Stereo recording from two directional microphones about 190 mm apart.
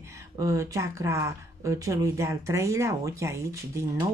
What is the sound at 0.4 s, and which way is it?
Speech, 15° right (ahead or behind).